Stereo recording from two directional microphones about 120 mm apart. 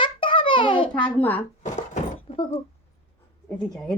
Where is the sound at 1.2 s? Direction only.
15° left (ahead or behind).